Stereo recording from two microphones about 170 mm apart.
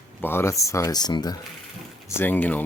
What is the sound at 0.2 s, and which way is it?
Speech, 15° left (ahead or behind).